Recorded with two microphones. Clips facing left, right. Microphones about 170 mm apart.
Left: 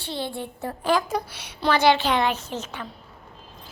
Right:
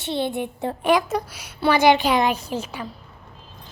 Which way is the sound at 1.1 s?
5° right (ahead or behind).